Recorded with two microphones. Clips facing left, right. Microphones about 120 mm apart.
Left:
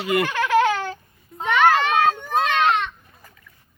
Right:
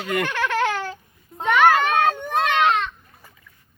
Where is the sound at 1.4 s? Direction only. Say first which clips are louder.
Right 1 dB; 10° right (ahead or behind).